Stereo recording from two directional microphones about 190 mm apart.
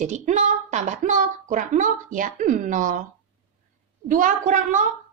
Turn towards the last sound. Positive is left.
turn(degrees=-40)  # may be behind; listen again after turning